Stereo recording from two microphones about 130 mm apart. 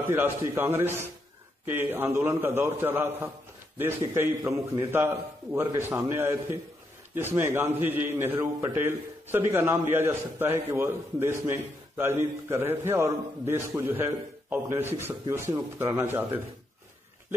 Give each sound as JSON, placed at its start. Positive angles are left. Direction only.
{"t": 0.1, "sound": "a man's voice", "side_deg": -15}